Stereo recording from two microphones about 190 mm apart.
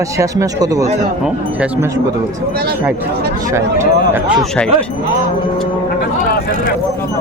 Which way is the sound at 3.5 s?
10° right (ahead or behind).